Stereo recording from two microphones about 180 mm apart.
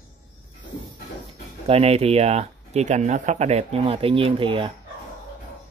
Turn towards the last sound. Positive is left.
turn(degrees=-30)  # may be behind; listen again after turning